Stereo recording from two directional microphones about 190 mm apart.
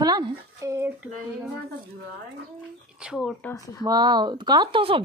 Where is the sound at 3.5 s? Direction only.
15° left (ahead or behind).